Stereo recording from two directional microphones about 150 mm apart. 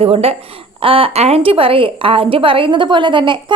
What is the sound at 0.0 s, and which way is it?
Speech, 40° right (ahead or behind).